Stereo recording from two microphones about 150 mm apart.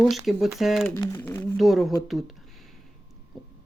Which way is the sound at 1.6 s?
Centre (ahead or behind).